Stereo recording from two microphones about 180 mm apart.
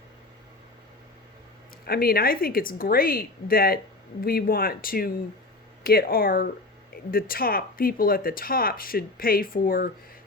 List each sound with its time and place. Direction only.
1.8 s speech: 55° left (ahead or behind)